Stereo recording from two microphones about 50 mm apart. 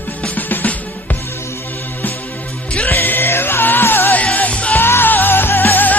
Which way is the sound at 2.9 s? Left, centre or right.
Left.